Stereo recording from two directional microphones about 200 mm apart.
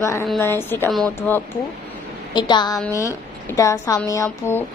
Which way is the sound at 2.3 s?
20° left (ahead or behind).